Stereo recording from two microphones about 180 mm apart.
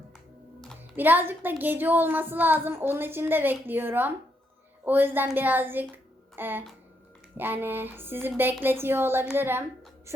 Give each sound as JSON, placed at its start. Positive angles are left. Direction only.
{"t": 0.9, "sound": "speech", "side_deg": -10}